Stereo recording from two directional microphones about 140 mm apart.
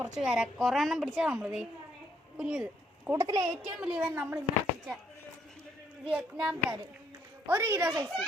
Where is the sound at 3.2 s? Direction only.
30° right (ahead or behind).